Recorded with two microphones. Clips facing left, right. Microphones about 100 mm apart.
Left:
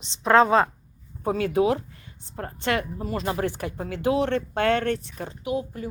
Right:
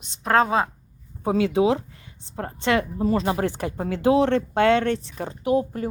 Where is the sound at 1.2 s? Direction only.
20° right (ahead or behind); by 5.9 s 50° right (ahead or behind).